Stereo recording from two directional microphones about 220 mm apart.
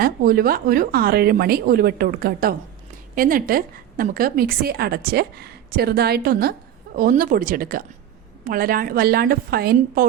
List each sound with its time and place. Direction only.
0.0 s a woman's voice: 40° right (ahead or behind)